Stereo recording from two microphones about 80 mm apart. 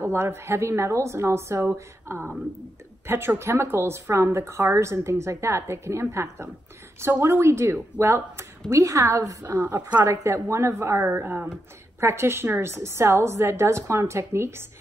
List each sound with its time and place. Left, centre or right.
0.0 s a woman's voice: right